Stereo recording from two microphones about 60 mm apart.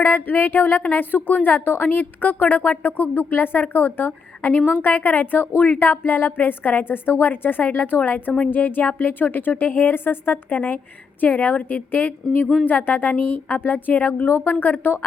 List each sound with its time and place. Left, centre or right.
0.0 s a woman's voice: left